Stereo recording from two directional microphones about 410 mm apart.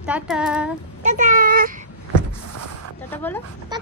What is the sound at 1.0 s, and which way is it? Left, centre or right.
Speech, centre.